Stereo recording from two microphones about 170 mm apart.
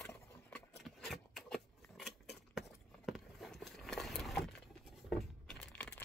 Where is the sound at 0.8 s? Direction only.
Centre (ahead or behind).